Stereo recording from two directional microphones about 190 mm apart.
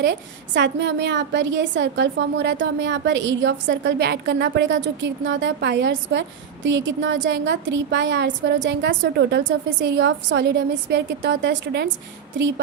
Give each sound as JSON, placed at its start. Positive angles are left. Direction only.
{"t": 0.0, "sound": "a woman's voice", "side_deg": -65}